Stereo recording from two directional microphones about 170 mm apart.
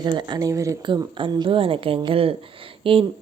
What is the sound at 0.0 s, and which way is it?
A woman's voice, 25° right (ahead or behind).